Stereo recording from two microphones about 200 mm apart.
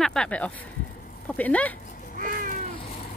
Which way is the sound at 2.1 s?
45° right (ahead or behind).